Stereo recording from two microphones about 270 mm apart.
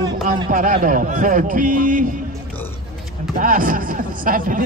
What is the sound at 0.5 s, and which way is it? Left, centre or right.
A man's voice, right.